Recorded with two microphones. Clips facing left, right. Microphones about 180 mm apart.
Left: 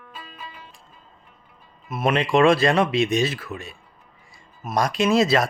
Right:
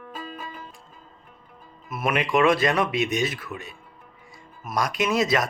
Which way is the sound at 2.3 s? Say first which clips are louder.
Left 3 dB; 30° left (ahead or behind).